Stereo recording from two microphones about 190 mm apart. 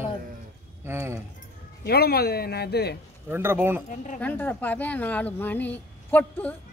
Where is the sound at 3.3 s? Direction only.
10° right (ahead or behind).